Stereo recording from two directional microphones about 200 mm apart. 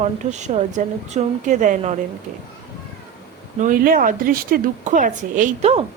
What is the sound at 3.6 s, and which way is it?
A woman's voice, 40° right (ahead or behind).